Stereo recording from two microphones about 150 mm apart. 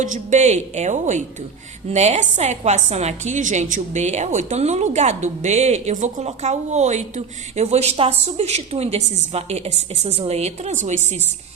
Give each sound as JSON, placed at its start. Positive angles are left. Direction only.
{"t": 0.0, "sound": "a woman's voice", "side_deg": -55}